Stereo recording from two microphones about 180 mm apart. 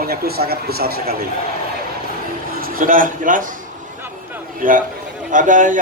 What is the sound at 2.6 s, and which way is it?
Speech, 55° right (ahead or behind).